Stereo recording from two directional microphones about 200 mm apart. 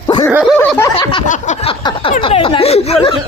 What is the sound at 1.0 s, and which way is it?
Speech, 25° left (ahead or behind).